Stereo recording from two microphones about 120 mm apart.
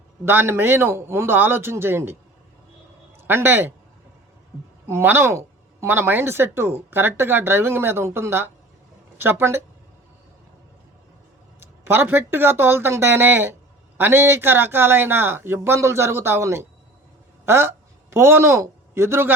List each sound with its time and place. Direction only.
0.3 s speech: 20° right (ahead or behind)
3.2 s speech: 20° right (ahead or behind)
4.9 s speech: 20° right (ahead or behind)
11.6 s a woman's voice: 20° right (ahead or behind)